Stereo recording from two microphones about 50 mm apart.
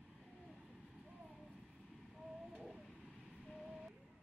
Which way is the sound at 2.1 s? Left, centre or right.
Centre.